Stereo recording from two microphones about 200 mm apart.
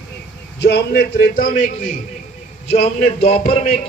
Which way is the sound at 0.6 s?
55° left (ahead or behind).